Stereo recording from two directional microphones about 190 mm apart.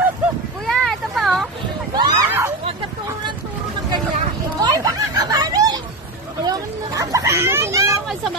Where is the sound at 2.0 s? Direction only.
20° right (ahead or behind).